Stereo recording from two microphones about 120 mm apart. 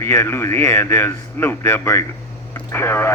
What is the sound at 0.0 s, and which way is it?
Speech, 20° left (ahead or behind).